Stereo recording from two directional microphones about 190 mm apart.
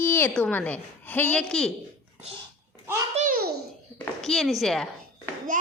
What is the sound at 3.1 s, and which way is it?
Speech, 45° right (ahead or behind).